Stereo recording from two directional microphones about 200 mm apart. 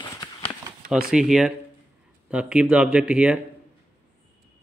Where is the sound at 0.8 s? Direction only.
Centre (ahead or behind).